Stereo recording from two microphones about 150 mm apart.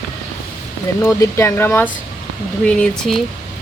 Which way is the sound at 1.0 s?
20° left (ahead or behind).